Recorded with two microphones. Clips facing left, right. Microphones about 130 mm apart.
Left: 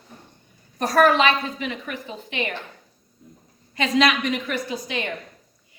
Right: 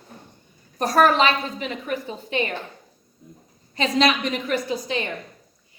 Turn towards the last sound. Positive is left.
turn(degrees=-30)  # may be behind; listen again after turning